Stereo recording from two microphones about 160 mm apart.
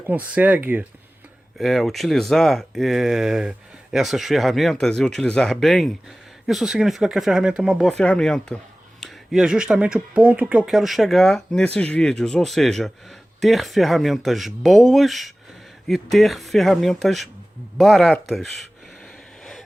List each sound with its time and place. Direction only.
0.0 s speech: 10° right (ahead or behind)
1.5 s speech: centre (ahead or behind)
19.0 s a sound: centre (ahead or behind)